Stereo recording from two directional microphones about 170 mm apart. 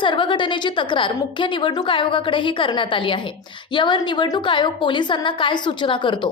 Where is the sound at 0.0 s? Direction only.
30° left (ahead or behind).